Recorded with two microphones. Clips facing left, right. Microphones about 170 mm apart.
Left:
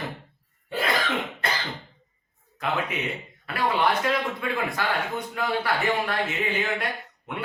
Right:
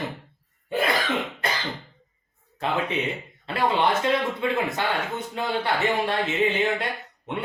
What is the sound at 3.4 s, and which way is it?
Speech, 25° right (ahead or behind).